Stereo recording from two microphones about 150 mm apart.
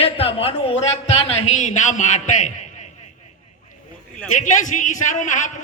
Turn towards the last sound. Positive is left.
turn(degrees=55)  # may be behind; listen again after turning